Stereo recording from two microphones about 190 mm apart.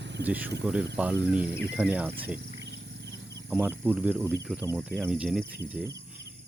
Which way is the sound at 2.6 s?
65° right (ahead or behind).